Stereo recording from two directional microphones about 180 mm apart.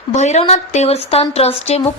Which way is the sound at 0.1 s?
40° left (ahead or behind).